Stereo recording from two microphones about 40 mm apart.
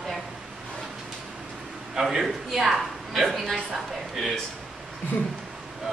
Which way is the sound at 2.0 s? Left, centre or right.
Centre.